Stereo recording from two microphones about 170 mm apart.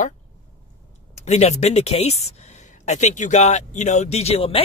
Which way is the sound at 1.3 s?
40° left (ahead or behind).